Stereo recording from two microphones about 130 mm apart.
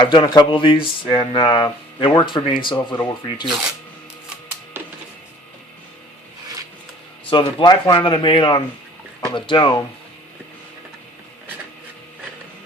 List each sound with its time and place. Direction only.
0.0 s speech: 40° left (ahead or behind)
7.3 s speech: 35° left (ahead or behind)